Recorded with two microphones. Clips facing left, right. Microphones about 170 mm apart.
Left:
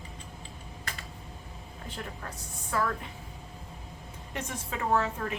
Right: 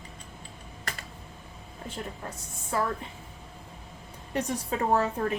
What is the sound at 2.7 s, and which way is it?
Speech, 25° right (ahead or behind).